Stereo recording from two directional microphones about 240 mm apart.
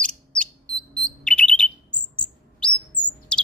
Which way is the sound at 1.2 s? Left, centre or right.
Centre.